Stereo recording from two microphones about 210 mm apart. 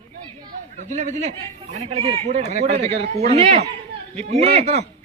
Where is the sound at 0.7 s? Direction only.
35° right (ahead or behind).